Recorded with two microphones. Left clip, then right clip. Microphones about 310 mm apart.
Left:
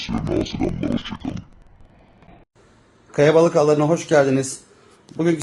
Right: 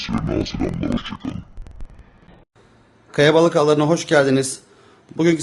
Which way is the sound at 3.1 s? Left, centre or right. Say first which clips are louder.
Even; centre.